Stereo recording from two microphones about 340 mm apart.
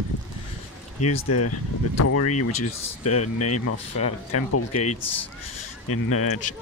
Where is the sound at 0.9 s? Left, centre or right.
Left.